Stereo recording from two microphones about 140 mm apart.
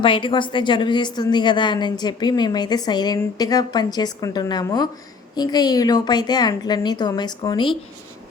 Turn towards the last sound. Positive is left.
turn(degrees=30)  # may be behind; listen again after turning